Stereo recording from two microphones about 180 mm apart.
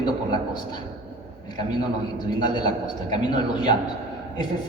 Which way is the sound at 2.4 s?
25° left (ahead or behind).